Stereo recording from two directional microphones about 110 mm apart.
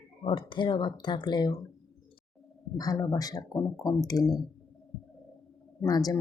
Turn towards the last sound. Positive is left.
turn(degrees=35)  # may be behind; listen again after turning